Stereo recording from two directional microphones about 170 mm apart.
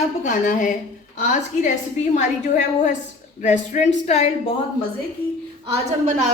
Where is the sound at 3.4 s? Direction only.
45° left (ahead or behind).